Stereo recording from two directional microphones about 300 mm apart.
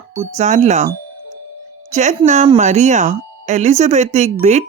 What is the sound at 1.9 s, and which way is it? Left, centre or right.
Speech, right.